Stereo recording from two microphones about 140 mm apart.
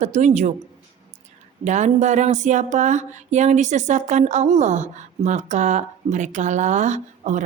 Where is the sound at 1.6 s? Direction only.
60° right (ahead or behind).